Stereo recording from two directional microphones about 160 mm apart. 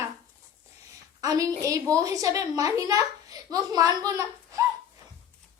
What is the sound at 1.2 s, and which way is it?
A woman's voice, 20° right (ahead or behind).